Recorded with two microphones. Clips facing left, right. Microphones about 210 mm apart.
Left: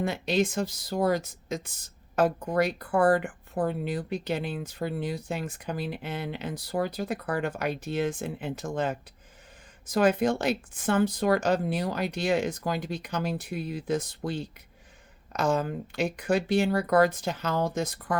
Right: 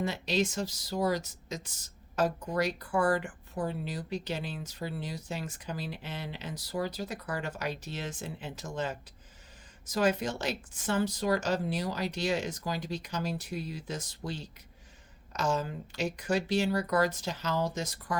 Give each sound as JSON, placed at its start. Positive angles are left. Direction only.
{"t": 0.0, "sound": "speech", "side_deg": 55}